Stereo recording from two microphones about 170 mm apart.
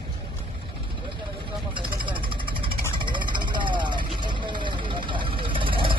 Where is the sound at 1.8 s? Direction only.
30° right (ahead or behind).